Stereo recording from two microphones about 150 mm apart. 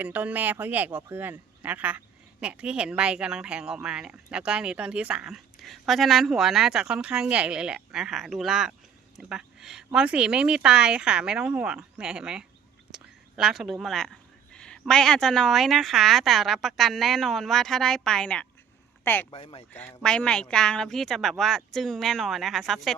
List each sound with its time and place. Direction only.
0.0 s speech: 10° right (ahead or behind)
12.9 s whispering: 5° right (ahead or behind)
14.5 s speech: 5° left (ahead or behind)
19.3 s speech: 35° left (ahead or behind)
19.7 s speech: 10° left (ahead or behind)